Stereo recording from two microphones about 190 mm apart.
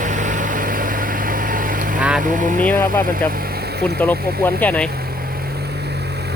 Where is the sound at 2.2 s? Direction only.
45° right (ahead or behind).